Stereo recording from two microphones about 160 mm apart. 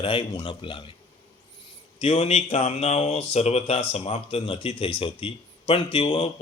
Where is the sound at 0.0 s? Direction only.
35° left (ahead or behind).